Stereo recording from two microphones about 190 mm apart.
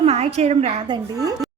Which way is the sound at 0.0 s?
30° right (ahead or behind).